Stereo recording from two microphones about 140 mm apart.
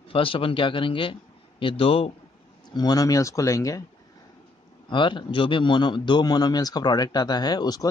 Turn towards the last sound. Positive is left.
turn(degrees=30)  # may be behind; listen again after turning